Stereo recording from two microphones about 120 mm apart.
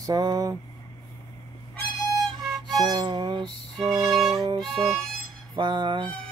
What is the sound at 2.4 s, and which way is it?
Music, centre (ahead or behind).